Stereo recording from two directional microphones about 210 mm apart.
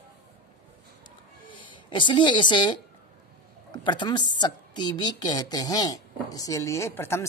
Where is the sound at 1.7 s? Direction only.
20° left (ahead or behind).